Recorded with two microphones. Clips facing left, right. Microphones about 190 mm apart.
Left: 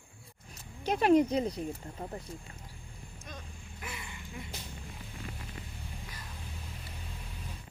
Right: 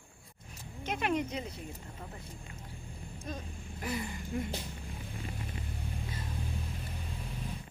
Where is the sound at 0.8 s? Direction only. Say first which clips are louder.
Left 8 dB; 35° left (ahead or behind).